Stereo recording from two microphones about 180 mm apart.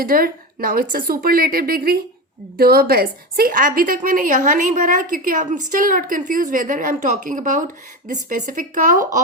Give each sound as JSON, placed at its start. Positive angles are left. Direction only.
{"t": 0.0, "sound": "a woman's voice", "side_deg": -55}